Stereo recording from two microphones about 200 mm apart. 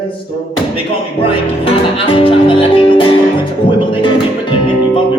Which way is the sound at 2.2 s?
25° left (ahead or behind).